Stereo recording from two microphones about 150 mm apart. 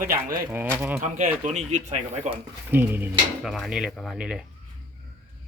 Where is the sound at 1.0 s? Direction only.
55° right (ahead or behind).